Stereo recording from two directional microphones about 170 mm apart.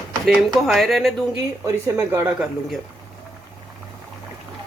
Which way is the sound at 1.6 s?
15° right (ahead or behind).